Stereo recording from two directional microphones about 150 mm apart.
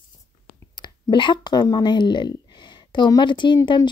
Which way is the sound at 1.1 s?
30° left (ahead or behind).